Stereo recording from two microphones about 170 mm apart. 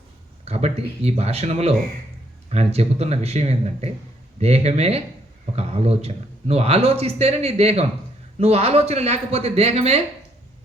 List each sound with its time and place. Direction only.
0.4 s a man's voice: 40° right (ahead or behind)